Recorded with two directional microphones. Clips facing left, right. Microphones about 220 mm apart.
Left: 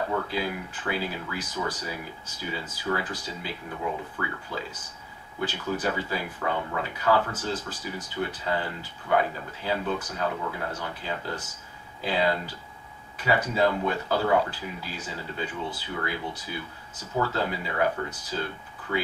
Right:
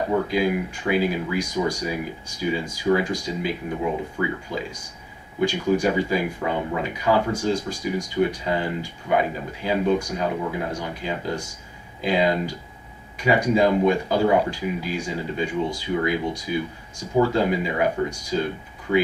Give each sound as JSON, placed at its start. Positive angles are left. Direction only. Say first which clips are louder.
{"t": 0.0, "sound": "speech", "louder": "right 7 dB", "side_deg": -15}